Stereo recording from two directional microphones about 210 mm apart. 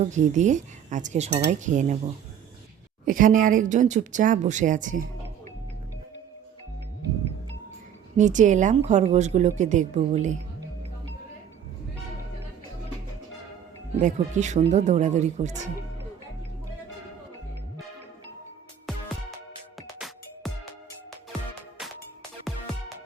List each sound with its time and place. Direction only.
0.0 s speech: 35° right (ahead or behind)
3.1 s speech: 40° right (ahead or behind)
8.1 s speech: 35° right (ahead or behind)
14.0 s speech: 35° right (ahead or behind)
20.4 s music: centre (ahead or behind)
21.8 s music: centre (ahead or behind)